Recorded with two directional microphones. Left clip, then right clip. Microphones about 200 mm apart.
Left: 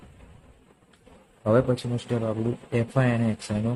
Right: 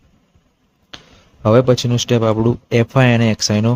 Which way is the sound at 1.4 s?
30° right (ahead or behind).